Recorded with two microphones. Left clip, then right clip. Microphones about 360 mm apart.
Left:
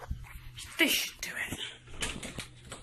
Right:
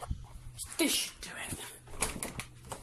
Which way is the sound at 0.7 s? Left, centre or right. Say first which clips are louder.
Left 4 dB; centre.